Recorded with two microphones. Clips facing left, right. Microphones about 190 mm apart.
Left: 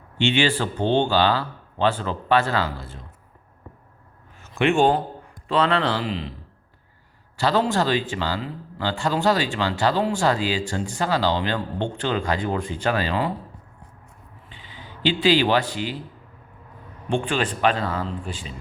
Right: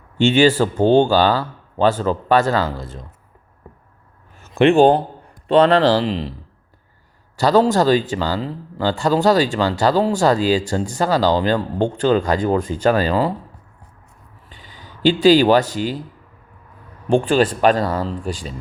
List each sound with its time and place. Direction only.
0.2 s speech: 45° right (ahead or behind)
4.5 s speech: 35° right (ahead or behind)
7.3 s speech: 40° right (ahead or behind)
14.5 s speech: 45° right (ahead or behind)
17.1 s speech: 40° right (ahead or behind)